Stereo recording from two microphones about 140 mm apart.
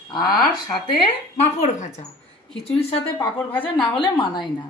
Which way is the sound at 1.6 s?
55° left (ahead or behind).